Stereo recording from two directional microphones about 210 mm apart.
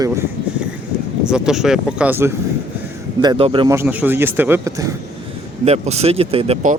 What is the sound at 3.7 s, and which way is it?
A man's voice, 10° right (ahead or behind).